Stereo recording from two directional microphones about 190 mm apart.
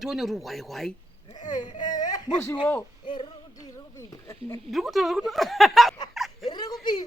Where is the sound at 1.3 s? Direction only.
20° left (ahead or behind).